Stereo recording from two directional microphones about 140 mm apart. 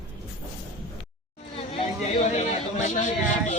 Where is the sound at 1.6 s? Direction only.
50° left (ahead or behind).